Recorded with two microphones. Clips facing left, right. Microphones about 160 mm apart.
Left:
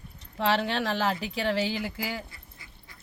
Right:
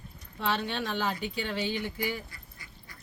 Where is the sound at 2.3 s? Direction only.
25° left (ahead or behind).